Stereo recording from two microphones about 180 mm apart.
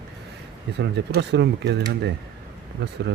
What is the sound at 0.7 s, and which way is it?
Speech, 70° right (ahead or behind).